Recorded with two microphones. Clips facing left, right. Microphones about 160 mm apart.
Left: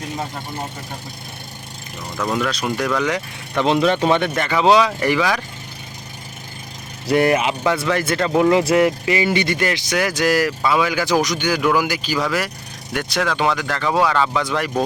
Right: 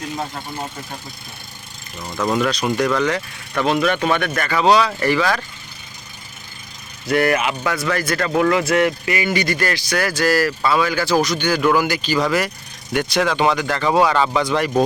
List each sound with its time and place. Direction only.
2.1 s speech: 5° right (ahead or behind); by 5.4 s 15° left (ahead or behind)
7.1 s speech: 25° left (ahead or behind); by 14.8 s centre (ahead or behind)